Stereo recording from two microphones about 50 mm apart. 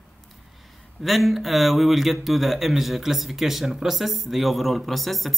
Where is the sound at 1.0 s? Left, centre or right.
Centre.